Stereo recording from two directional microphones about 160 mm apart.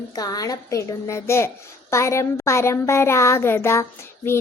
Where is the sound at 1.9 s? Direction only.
15° left (ahead or behind).